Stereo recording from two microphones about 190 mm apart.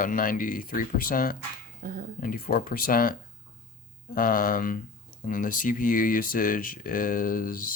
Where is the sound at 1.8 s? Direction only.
45° right (ahead or behind).